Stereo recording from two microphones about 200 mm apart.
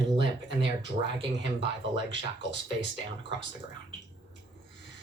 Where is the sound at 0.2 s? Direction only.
60° right (ahead or behind).